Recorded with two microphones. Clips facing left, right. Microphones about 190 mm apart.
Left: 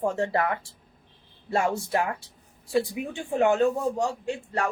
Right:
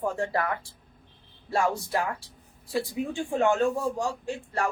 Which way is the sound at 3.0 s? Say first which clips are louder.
Right 2 dB; 10° left (ahead or behind).